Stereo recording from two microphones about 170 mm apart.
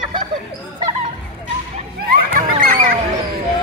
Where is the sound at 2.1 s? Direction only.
55° right (ahead or behind).